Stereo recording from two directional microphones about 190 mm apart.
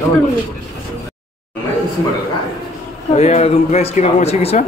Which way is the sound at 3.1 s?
35° left (ahead or behind).